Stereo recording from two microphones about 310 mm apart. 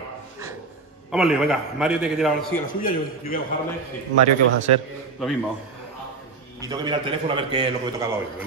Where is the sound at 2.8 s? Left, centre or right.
Left.